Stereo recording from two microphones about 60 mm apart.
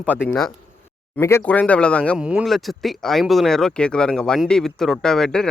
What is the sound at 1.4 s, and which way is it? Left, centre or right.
Speech, left.